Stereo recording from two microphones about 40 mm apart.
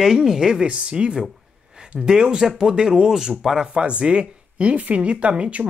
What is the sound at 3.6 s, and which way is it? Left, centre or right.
Speech, right.